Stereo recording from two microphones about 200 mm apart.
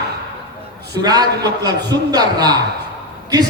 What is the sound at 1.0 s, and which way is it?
A man's voice, 20° right (ahead or behind).